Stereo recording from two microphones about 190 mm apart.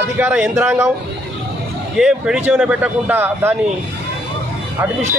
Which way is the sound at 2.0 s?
5° right (ahead or behind).